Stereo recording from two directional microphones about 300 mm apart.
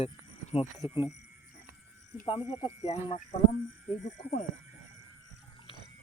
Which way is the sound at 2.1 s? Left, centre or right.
Centre.